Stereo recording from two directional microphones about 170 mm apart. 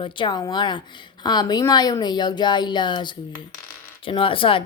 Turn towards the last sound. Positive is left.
turn(degrees=30)  # may be behind; listen again after turning